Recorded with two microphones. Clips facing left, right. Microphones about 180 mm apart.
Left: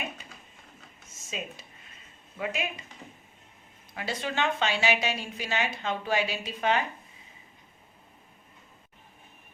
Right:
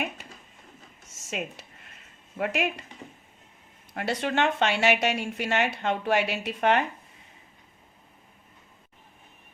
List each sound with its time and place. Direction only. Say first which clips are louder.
1.2 s speech: right 4 dB; 75° right (ahead or behind)
3.9 s a woman's voice: right 5 dB; 65° right (ahead or behind)